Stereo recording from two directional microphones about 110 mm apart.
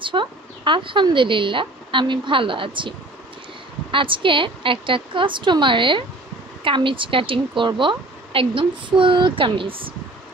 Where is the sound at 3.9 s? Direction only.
50° right (ahead or behind).